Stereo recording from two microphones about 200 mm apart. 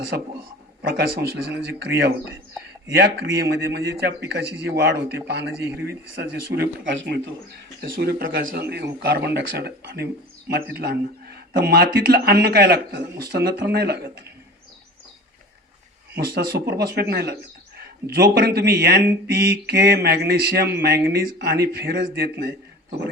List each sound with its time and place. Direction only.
0.8 s a man's voice: 60° right (ahead or behind)
16.1 s a man's voice: 55° right (ahead or behind)